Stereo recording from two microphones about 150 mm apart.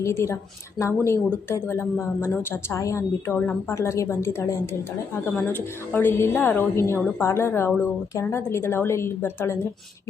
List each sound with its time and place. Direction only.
0.0 s a woman's voice: 20° left (ahead or behind)